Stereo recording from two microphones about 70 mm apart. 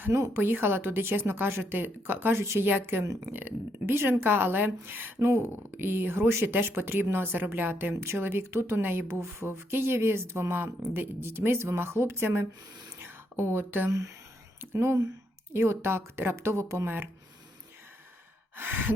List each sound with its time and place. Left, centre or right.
0.0 s speech: right
13.0 s a sound: right
14.6 s speech: right
18.5 s speech: right